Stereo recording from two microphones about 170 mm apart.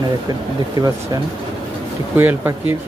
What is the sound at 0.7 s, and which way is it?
Speech, 25° right (ahead or behind).